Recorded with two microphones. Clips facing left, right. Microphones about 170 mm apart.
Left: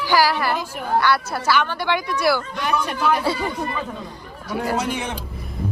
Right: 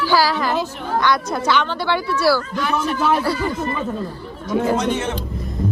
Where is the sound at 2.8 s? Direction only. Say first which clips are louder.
Right 3 dB; centre (ahead or behind).